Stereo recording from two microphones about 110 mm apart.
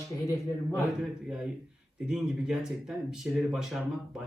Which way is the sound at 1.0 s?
5° right (ahead or behind).